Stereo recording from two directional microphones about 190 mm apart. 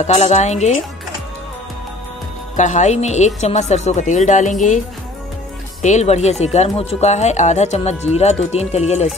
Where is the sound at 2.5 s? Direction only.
40° left (ahead or behind).